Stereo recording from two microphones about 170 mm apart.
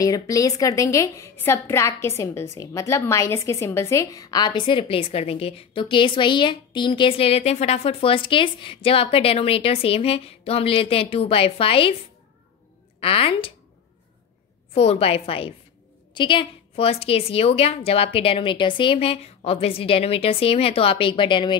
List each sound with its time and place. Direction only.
0.0 s a woman's voice: 20° left (ahead or behind)
13.0 s a woman's voice: 35° left (ahead or behind)
14.7 s a woman's voice: 35° left (ahead or behind)